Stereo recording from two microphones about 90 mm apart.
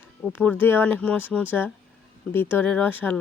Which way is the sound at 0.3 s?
25° left (ahead or behind).